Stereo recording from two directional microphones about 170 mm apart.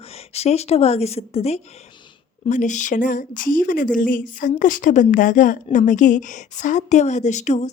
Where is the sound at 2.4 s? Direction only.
45° left (ahead or behind).